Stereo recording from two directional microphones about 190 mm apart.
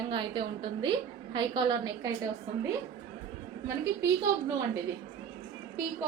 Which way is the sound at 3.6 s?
15° right (ahead or behind).